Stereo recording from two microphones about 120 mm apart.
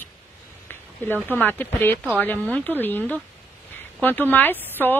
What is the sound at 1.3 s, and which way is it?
Speech, 15° left (ahead or behind).